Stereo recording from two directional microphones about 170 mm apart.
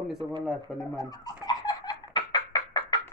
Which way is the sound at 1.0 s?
25° left (ahead or behind).